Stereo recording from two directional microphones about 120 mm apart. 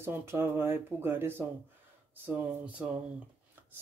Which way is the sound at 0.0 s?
20° right (ahead or behind).